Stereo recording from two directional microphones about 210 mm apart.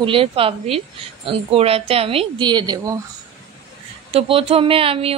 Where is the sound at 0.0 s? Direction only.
25° right (ahead or behind).